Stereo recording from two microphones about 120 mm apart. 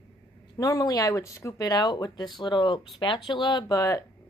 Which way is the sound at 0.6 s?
30° left (ahead or behind).